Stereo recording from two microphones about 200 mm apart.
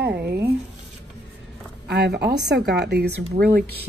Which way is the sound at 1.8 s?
55° right (ahead or behind).